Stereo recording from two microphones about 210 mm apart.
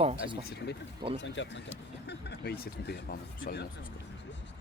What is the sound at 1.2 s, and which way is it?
Speech, 60° left (ahead or behind).